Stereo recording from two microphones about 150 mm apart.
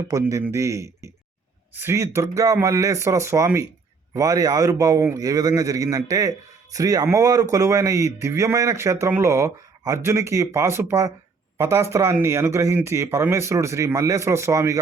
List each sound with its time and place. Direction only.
0.1 s speech: 20° right (ahead or behind)